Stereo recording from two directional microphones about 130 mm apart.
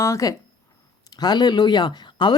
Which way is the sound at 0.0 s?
25° left (ahead or behind).